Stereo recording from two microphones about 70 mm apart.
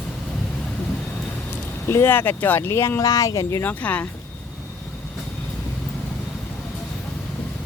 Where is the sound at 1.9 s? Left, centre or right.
Left.